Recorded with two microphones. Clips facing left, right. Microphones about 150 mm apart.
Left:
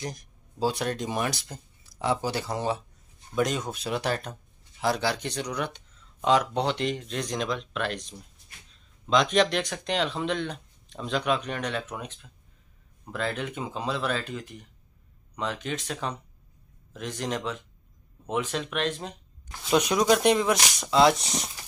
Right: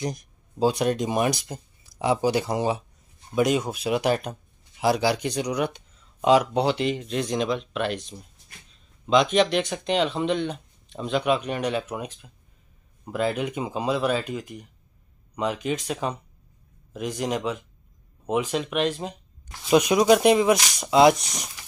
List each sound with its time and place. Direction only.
0.0 s speech: 15° right (ahead or behind)